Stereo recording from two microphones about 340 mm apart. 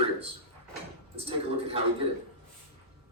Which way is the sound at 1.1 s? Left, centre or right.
Centre.